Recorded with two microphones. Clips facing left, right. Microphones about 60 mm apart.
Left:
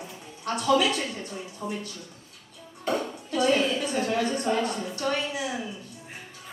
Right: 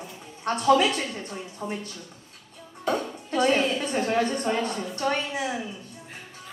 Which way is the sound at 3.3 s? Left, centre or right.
Right.